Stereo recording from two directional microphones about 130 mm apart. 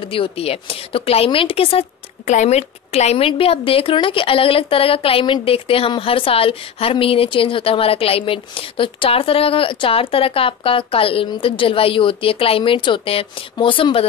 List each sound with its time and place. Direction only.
0.0 s a woman's voice: 45° left (ahead or behind)
2.2 s a woman's voice: 65° left (ahead or behind); by 14.0 s 40° left (ahead or behind)